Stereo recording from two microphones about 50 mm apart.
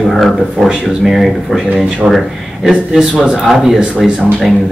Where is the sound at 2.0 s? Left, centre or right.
Right.